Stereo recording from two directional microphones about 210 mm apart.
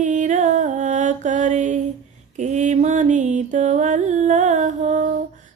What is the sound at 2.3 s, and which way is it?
Music, 35° right (ahead or behind).